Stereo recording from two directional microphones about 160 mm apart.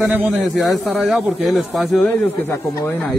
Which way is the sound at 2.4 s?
20° left (ahead or behind).